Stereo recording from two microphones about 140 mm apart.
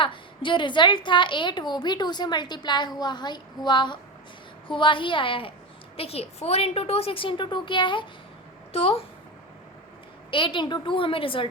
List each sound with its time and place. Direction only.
0.0 s a woman's voice: 35° left (ahead or behind)
10.3 s a woman's voice: 35° left (ahead or behind)